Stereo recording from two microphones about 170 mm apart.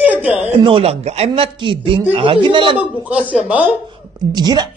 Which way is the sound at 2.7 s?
10° right (ahead or behind).